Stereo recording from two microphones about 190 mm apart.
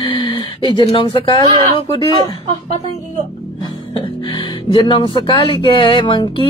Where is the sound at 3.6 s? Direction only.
25° left (ahead or behind).